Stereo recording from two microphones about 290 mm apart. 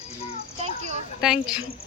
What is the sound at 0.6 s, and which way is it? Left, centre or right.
Speech, right.